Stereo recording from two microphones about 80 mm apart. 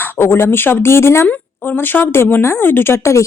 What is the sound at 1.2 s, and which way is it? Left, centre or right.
Speech, centre.